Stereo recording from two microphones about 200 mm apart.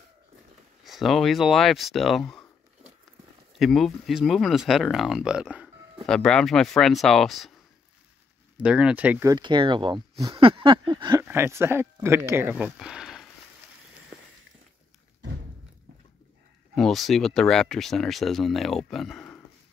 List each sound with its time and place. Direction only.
0.8 s speech: centre (ahead or behind)
8.5 s speech: 5° right (ahead or behind)
16.7 s speech: centre (ahead or behind)